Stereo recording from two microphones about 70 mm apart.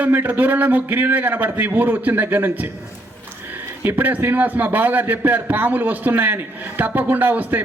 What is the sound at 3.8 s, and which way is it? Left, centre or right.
A man's voice, right.